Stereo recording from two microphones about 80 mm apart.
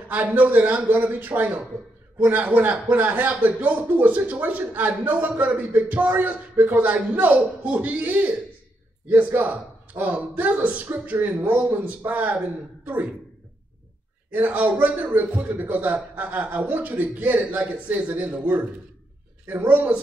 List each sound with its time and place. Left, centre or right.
0.1 s speech: centre
14.3 s speech: right